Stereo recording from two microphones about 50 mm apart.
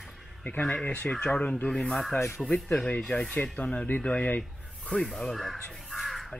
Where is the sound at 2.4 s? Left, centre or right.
Centre.